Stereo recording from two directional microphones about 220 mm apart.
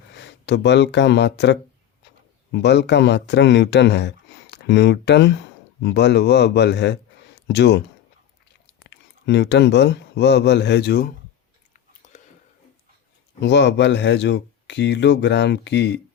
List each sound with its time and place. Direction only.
0.1 s speech: 50° left (ahead or behind)
8.9 s speech: 50° left (ahead or behind)
12.0 s a sound: 30° left (ahead or behind)
13.4 s speech: 50° left (ahead or behind)